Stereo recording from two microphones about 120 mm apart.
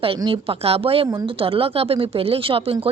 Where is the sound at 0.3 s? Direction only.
55° right (ahead or behind).